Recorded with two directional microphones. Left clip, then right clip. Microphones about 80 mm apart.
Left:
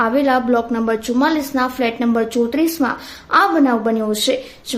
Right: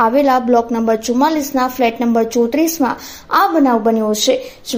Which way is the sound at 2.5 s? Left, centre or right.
Right.